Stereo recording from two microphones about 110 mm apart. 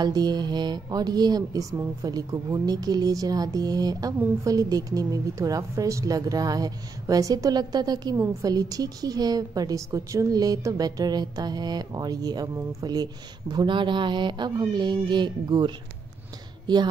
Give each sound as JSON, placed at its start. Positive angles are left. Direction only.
{"t": 0.0, "sound": "speech", "side_deg": -40}